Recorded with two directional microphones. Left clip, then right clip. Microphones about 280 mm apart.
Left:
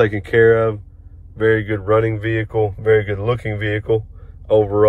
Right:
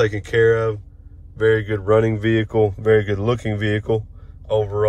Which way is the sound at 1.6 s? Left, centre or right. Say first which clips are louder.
Left 1 dB; centre.